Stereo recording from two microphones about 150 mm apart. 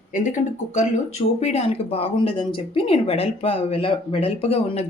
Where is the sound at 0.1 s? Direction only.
50° left (ahead or behind).